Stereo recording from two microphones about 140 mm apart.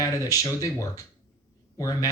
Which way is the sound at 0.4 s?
25° left (ahead or behind).